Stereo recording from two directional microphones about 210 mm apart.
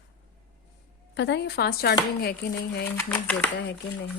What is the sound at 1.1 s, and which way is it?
Speech, 55° left (ahead or behind).